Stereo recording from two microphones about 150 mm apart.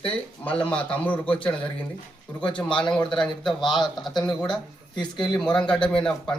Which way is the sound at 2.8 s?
30° left (ahead or behind).